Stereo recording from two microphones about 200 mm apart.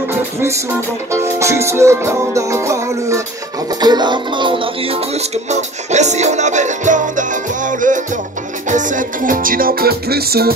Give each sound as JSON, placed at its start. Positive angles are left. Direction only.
{"t": 1.1, "sound": "music", "side_deg": -15}